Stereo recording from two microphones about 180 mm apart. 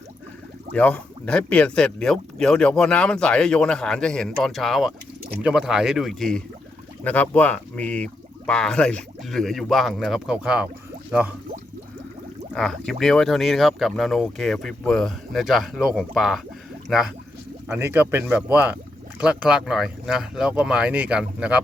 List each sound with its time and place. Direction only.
0.7 s speech: 5° left (ahead or behind)
12.5 s speech: 5° left (ahead or behind)
17.7 s speech: 10° right (ahead or behind)